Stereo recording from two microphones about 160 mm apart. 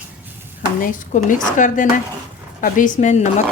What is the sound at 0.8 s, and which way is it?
A woman's voice, 55° left (ahead or behind).